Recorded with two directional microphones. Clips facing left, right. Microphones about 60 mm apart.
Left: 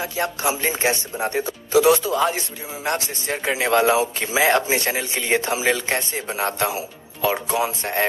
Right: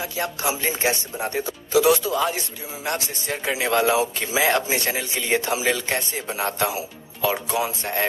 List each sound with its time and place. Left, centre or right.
0.0 s speech: left